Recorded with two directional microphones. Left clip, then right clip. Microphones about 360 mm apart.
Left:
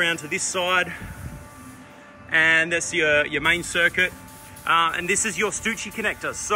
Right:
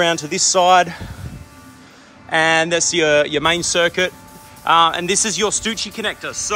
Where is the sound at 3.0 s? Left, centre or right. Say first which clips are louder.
Right 4 dB; centre.